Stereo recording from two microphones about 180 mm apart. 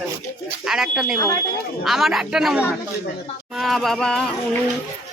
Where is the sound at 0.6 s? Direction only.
5° right (ahead or behind).